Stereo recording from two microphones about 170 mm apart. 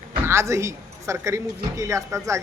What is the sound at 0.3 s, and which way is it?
A woman's voice, 15° right (ahead or behind).